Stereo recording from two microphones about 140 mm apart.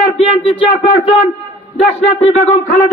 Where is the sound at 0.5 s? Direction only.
40° left (ahead or behind).